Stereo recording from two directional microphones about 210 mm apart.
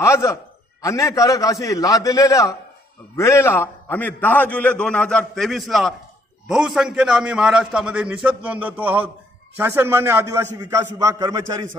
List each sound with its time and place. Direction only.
0.0 s a man's voice: 15° left (ahead or behind); by 11.6 s 15° right (ahead or behind)